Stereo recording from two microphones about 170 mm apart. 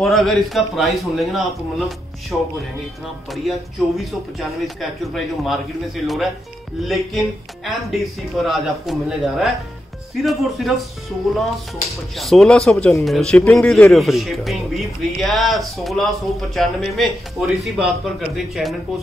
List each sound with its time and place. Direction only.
0.0 s a man's voice: centre (ahead or behind)
2.3 s speech: 10° left (ahead or behind)
3.4 s a man's voice: centre (ahead or behind)
6.9 s a man's voice: centre (ahead or behind)
12.2 s a man's voice: centre (ahead or behind)